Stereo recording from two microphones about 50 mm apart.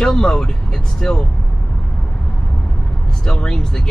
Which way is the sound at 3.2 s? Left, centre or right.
Centre.